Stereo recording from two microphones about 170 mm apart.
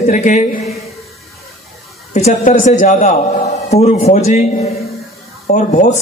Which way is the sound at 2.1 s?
45° left (ahead or behind).